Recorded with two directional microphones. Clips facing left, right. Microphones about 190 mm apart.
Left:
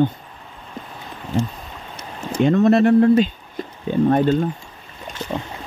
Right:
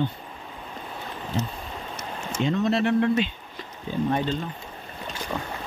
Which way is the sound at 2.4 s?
50° left (ahead or behind).